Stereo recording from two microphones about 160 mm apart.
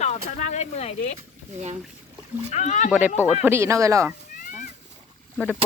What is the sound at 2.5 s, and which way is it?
Speech, 45° left (ahead or behind).